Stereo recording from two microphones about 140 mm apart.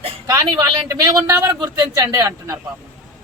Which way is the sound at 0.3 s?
25° right (ahead or behind).